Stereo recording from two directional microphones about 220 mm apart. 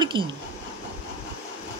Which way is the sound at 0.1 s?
20° right (ahead or behind).